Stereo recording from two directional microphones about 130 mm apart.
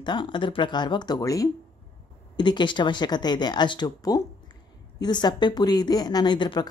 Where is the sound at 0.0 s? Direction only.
35° left (ahead or behind).